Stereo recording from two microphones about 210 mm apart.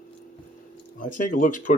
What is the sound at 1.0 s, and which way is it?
Speech, 40° left (ahead or behind).